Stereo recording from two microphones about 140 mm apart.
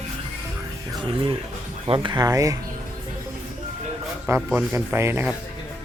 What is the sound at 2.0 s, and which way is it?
Speech, 25° right (ahead or behind).